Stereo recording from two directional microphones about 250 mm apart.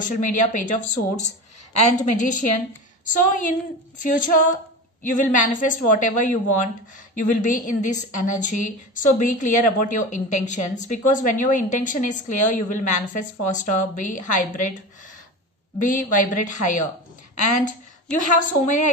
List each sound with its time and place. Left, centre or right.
0.5 s a woman's voice: left
15.8 s a woman's voice: left
18.1 s a woman's voice: left